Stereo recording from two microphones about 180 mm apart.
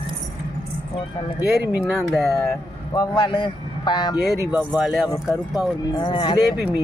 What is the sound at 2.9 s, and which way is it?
Speech, 25° left (ahead or behind).